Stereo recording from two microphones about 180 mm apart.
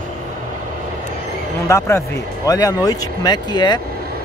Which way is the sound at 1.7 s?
15° left (ahead or behind).